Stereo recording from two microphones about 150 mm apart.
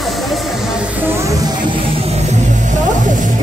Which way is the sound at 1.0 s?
15° right (ahead or behind).